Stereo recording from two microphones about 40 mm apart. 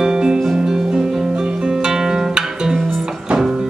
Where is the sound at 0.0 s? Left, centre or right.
Centre.